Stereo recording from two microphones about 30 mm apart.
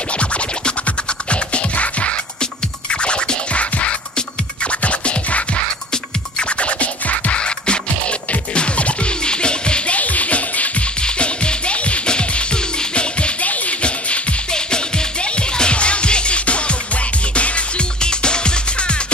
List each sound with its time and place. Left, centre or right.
0.8 s music: left
4.6 s music: left
6.6 s music: left
7.4 s music: left
9.9 s music: left
11.0 s music: left
13.4 s music: left
15.3 s music: left
18.0 s music: left